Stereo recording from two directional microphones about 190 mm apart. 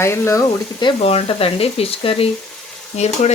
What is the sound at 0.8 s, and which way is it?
Speech, 30° left (ahead or behind).